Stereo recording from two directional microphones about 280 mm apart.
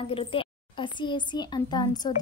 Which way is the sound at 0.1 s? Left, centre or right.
Centre.